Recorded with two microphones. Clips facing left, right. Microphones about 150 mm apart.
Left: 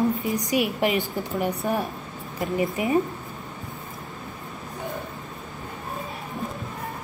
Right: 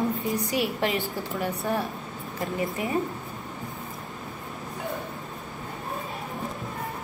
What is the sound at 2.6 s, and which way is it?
Speech, 15° left (ahead or behind).